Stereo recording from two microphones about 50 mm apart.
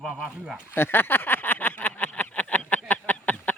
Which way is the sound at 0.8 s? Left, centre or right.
Left.